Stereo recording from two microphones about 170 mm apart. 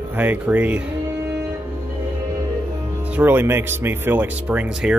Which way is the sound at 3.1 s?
10° right (ahead or behind).